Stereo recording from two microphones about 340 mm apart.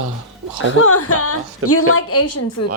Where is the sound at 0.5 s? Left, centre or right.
Left.